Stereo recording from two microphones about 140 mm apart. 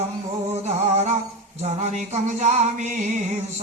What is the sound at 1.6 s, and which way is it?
Music, 55° right (ahead or behind).